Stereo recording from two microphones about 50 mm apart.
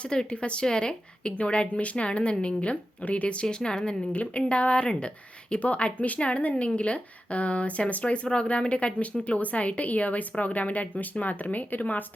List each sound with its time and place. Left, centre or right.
0.0 s speech: centre; by 12.0 s left